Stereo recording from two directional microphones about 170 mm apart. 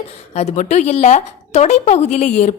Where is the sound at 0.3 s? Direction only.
40° left (ahead or behind).